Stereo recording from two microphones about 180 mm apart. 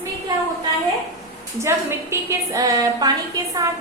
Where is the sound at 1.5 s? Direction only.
15° right (ahead or behind).